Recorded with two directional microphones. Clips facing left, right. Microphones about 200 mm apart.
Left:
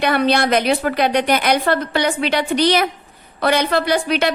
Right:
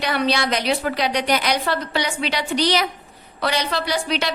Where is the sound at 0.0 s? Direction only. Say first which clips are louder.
Left 5 dB; 55° left (ahead or behind).